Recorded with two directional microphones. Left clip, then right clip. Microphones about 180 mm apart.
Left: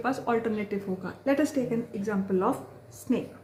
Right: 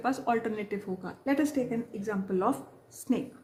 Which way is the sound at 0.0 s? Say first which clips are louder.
Left 1 dB; 30° right (ahead or behind).